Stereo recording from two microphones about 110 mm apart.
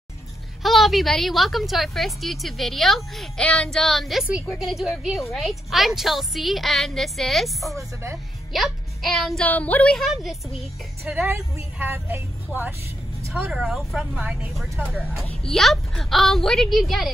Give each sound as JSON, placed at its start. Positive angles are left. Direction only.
{"t": 0.6, "sound": "a woman's voice", "side_deg": 0}
{"t": 7.7, "sound": "speech", "side_deg": -25}
{"t": 8.5, "sound": "a child's voice", "side_deg": 0}
{"t": 9.5, "sound": "a woman's voice", "side_deg": 15}
{"t": 9.9, "sound": "a woman's voice", "side_deg": 0}
{"t": 11.2, "sound": "speech", "side_deg": -20}
{"t": 13.5, "sound": "a woman's voice", "side_deg": 0}
{"t": 14.2, "sound": "speech", "side_deg": -15}
{"t": 15.2, "sound": "a woman's voice", "side_deg": 5}